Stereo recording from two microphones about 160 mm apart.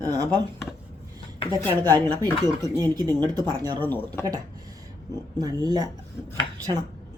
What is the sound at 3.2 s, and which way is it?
Speech, 25° right (ahead or behind).